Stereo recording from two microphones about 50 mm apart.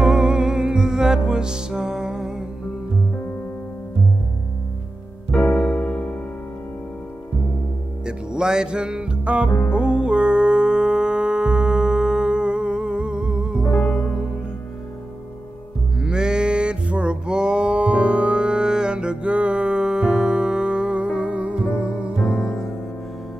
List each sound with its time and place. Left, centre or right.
0.0 s music: centre
5.3 s music: left
8.0 s music: centre
9.5 s music: left
9.8 s music: centre
16.0 s livestock: centre